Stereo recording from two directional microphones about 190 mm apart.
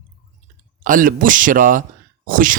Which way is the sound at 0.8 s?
45° right (ahead or behind).